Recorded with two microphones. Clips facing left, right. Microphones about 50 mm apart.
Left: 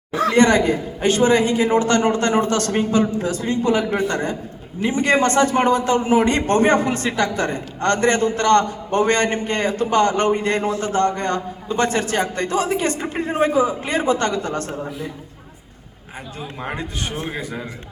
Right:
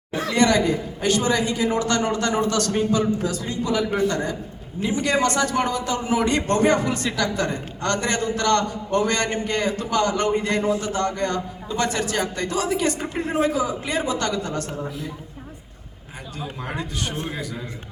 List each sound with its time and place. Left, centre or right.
0.3 s a man's voice: left
16.6 s a man's voice: left